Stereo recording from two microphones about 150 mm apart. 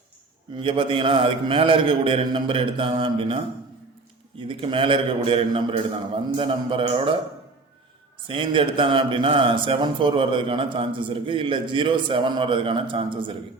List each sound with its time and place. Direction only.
0.5 s a man's voice: 35° right (ahead or behind)
8.3 s a man's voice: 35° right (ahead or behind)